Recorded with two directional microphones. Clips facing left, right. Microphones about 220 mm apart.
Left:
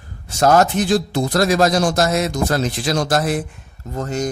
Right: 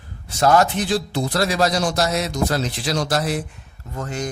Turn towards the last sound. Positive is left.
turn(degrees=40)  # may be behind; listen again after turning